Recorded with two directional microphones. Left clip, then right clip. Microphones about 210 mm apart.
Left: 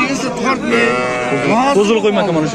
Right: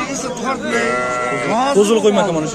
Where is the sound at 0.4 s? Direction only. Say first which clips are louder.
Left 4 dB; 50° right (ahead or behind).